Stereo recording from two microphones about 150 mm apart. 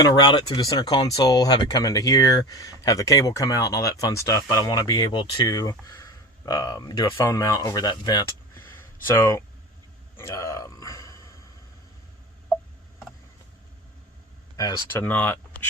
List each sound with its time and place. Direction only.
0.0 s speech: 30° left (ahead or behind)
9.0 s speech: 15° left (ahead or behind)
10.2 s a sound: 20° left (ahead or behind)
14.5 s speech: 25° left (ahead or behind)
15.0 s speech: 10° left (ahead or behind)